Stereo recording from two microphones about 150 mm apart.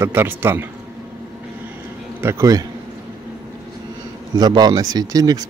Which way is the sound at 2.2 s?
20° right (ahead or behind).